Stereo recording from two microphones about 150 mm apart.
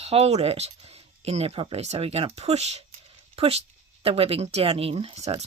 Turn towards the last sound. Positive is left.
turn(degrees=-45)  # may be behind; listen again after turning